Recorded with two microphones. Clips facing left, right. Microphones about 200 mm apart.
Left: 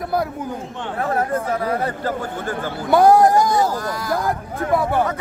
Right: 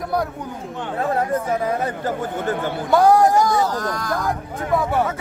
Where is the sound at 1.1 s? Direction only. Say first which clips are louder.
Even; 20° right (ahead or behind).